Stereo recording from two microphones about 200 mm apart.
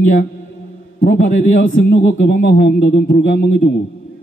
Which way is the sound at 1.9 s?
60° left (ahead or behind).